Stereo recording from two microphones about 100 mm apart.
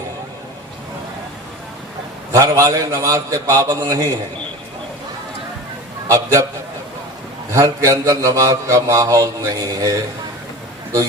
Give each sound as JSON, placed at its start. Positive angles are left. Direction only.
{"t": 2.3, "sound": "mantra", "side_deg": -35}
{"t": 7.5, "sound": "mantra", "side_deg": -35}